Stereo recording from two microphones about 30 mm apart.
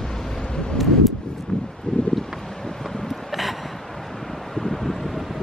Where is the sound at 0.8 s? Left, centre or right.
Centre.